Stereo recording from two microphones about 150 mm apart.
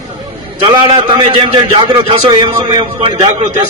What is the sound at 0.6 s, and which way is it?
A man's voice, 35° right (ahead or behind).